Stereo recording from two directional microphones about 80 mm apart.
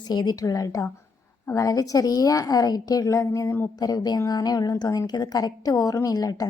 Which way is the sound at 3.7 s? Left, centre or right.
Left.